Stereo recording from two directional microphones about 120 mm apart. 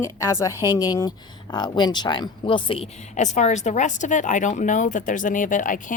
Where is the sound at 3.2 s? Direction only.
75° left (ahead or behind).